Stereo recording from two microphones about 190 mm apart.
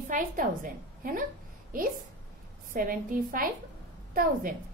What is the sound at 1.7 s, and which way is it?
A woman's voice, 45° right (ahead or behind).